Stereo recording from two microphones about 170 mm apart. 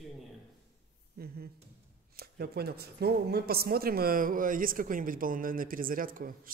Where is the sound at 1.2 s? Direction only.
65° right (ahead or behind).